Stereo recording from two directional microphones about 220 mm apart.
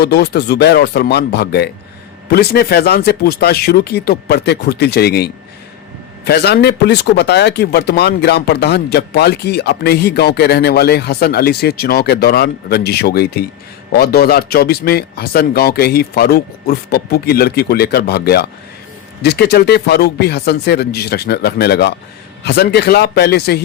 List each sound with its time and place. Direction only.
0.0 s speech: 50° left (ahead or behind)